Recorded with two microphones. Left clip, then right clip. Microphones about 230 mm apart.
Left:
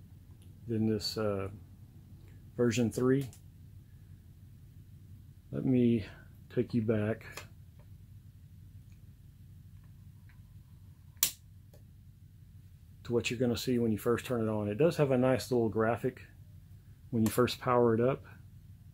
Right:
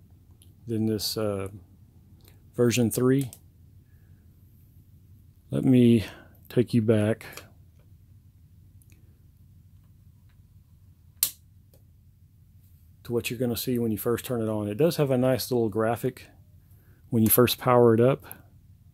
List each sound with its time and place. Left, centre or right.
0.7 s speech: right
2.5 s speech: right
5.5 s speech: right
13.0 s speech: right